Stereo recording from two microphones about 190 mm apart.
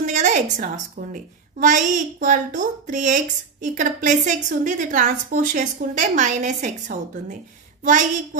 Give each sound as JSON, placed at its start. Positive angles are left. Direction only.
{"t": 0.0, "sound": "a woman's voice", "side_deg": -40}